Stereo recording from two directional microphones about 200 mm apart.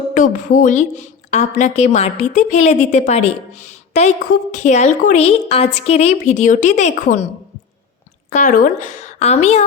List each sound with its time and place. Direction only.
0.1 s a woman's voice: 40° left (ahead or behind)
8.3 s a woman's voice: 40° left (ahead or behind)